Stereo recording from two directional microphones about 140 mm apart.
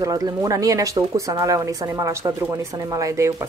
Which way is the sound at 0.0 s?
25° right (ahead or behind).